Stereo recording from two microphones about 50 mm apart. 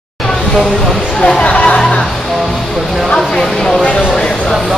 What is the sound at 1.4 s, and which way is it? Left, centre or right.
Speech, left.